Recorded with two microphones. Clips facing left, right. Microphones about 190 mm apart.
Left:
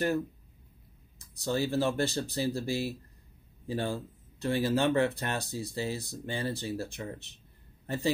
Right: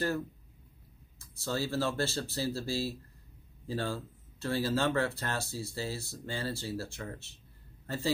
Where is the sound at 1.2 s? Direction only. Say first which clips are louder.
Left 4 dB; 15° left (ahead or behind).